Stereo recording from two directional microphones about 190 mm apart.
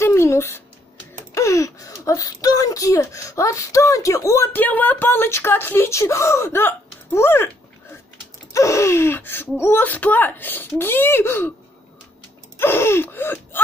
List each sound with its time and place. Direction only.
0.0 s a sound: 15° left (ahead or behind)
1.3 s speech: 15° left (ahead or behind)
8.5 s speech: 15° left (ahead or behind)
12.5 s gasp: 10° left (ahead or behind)